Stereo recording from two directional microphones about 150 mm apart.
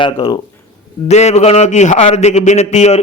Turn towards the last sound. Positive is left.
turn(degrees=50)  # may be behind; listen again after turning